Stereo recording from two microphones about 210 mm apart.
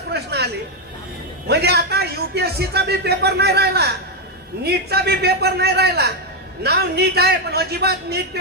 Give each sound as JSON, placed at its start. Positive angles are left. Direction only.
{"t": 0.1, "sound": "chatter", "side_deg": -50}
{"t": 1.5, "sound": "a man's voice", "side_deg": -50}